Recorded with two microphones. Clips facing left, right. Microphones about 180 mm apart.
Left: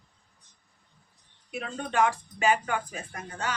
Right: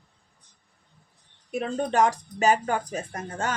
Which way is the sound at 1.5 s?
40° right (ahead or behind).